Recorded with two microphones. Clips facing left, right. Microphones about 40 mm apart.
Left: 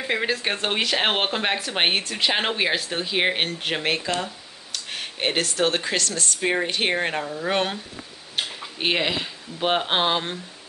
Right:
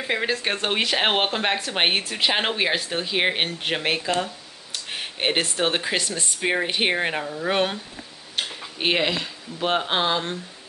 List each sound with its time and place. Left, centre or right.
0.0 s speech: centre
4.7 s a sound: centre
5.4 s speech: centre
8.4 s tick-tock: centre
9.1 s speech: centre